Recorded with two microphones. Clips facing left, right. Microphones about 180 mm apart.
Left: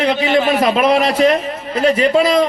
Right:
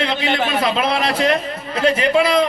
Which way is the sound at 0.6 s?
45° left (ahead or behind).